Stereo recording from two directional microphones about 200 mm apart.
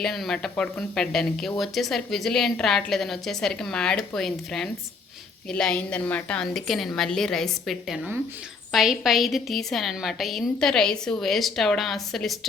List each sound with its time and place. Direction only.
0.0 s speech: centre (ahead or behind)